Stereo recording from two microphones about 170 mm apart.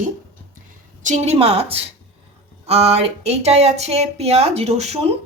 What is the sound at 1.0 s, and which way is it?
Speech, 40° right (ahead or behind).